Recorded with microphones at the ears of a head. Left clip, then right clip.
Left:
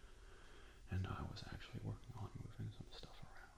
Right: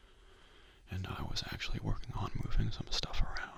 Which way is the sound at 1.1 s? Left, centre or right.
Right.